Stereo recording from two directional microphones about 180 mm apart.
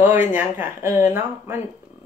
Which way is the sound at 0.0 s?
10° right (ahead or behind).